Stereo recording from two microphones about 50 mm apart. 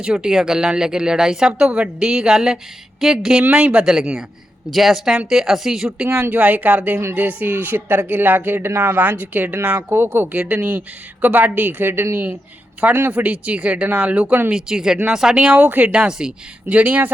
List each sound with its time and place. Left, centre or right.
0.0 s speech: centre
3.4 s speech: right
3.8 s speech: centre
6.3 s speech: right
9.0 s speech: right
10.5 s speech: right
14.5 s speech: centre
15.4 s speech: right
15.9 s speech: centre
16.6 s speech: right